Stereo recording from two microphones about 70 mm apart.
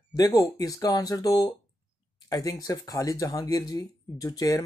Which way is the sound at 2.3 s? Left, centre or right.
Left.